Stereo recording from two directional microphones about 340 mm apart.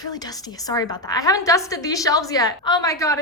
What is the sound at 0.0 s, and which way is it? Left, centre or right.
A woman's voice, centre.